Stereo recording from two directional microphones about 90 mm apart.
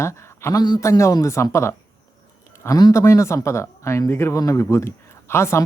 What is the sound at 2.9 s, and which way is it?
A man's voice, 35° left (ahead or behind).